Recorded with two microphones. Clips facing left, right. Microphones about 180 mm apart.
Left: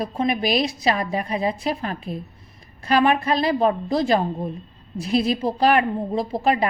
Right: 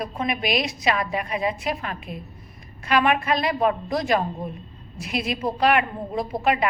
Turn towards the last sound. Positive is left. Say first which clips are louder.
# left 2 dB
turn(degrees=35)  # may be behind; listen again after turning